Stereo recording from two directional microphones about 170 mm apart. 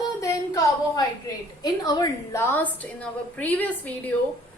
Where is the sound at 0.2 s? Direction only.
20° left (ahead or behind).